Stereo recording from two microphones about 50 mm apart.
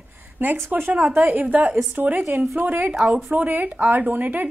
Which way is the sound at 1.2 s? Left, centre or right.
Right.